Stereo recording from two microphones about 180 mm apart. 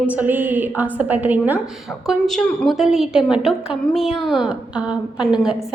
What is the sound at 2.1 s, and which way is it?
A woman's voice, centre (ahead or behind).